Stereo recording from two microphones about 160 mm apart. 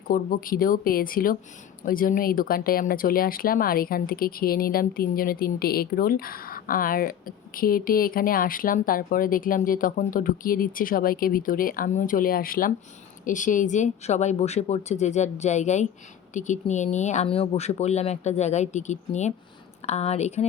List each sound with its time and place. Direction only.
0.1 s speech: 60° left (ahead or behind); by 20.5 s 45° left (ahead or behind)